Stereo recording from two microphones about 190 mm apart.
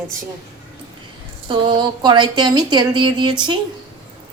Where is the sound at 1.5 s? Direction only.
25° right (ahead or behind).